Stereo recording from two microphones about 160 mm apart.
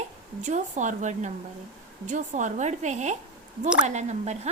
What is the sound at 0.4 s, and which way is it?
A woman's voice, 50° right (ahead or behind).